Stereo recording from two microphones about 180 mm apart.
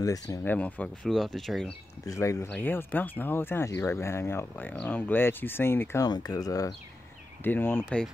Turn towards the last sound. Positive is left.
turn(degrees=10)  # may be behind; listen again after turning